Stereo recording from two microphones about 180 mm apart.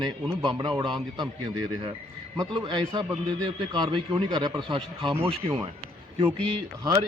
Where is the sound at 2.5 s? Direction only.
25° right (ahead or behind).